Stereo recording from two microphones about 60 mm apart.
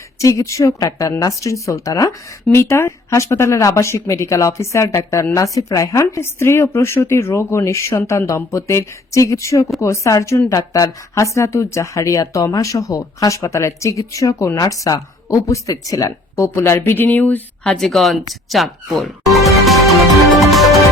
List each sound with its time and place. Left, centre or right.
0.2 s speech: left
10.5 s speech: left
17.6 s speech: centre
19.0 s music: centre